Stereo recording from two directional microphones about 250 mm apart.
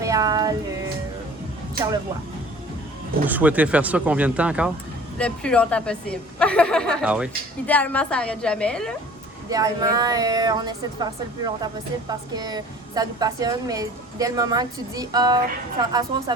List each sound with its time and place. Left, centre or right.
0.0 s music: centre
3.2 s a woman's voice: centre
7.7 s a woman's voice: centre
9.5 s speech: centre